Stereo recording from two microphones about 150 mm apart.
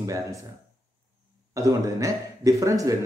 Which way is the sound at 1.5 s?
20° right (ahead or behind).